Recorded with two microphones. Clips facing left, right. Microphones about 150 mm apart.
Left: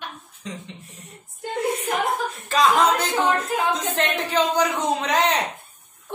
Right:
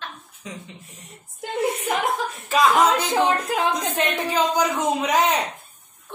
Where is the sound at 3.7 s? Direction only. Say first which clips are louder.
Even; 10° right (ahead or behind).